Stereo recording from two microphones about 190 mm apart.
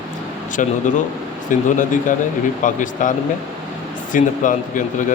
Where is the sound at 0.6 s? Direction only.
40° left (ahead or behind).